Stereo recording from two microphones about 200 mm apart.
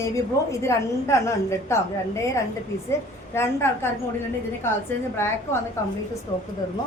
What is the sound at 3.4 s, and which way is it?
Speech, 15° left (ahead or behind).